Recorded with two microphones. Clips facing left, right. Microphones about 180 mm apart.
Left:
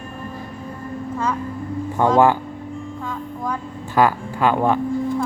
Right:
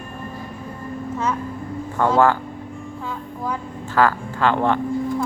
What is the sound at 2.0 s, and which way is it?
Speech, 15° left (ahead or behind).